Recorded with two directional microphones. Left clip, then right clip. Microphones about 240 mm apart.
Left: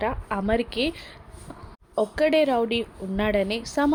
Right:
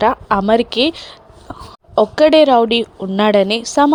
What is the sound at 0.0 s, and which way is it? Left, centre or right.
A woman's voice, right.